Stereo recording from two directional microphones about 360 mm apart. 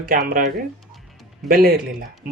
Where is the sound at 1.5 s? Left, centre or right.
Right.